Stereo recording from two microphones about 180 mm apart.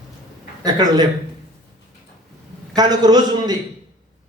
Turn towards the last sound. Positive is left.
turn(degrees=-20)  # may be behind; listen again after turning